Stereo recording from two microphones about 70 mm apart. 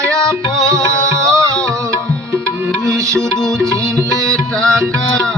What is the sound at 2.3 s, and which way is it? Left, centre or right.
Music, right.